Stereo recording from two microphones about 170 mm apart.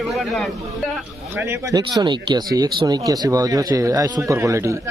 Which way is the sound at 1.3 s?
15° right (ahead or behind).